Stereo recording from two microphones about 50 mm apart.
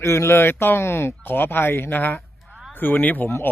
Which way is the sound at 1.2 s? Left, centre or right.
Left.